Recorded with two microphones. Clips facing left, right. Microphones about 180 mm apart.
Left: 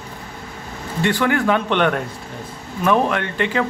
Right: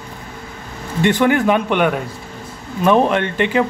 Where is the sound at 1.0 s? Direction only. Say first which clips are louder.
Right 4 dB; 20° right (ahead or behind).